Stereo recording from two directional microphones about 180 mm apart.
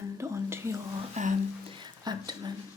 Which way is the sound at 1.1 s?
45° right (ahead or behind).